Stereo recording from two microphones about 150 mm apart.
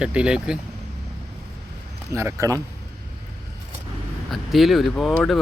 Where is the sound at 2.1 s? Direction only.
20° right (ahead or behind).